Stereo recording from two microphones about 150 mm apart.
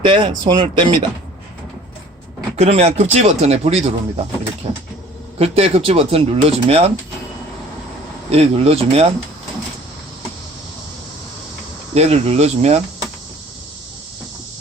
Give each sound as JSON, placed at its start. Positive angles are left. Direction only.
{"t": 0.0, "sound": "speech", "side_deg": -35}
{"t": 2.6, "sound": "speech", "side_deg": -45}
{"t": 8.3, "sound": "speech", "side_deg": -45}
{"t": 11.9, "sound": "speech", "side_deg": -45}